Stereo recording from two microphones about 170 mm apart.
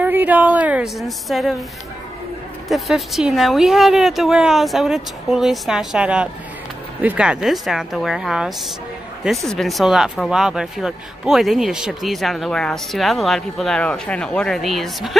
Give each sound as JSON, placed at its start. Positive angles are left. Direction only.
{"t": 0.0, "sound": "a woman's voice", "side_deg": -10}
{"t": 2.7, "sound": "speech", "side_deg": 0}